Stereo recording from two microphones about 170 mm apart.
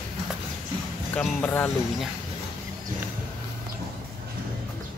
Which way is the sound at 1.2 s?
10° left (ahead or behind).